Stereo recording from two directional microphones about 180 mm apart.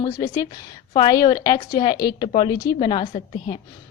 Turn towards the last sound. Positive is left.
turn(degrees=30)  # may be behind; listen again after turning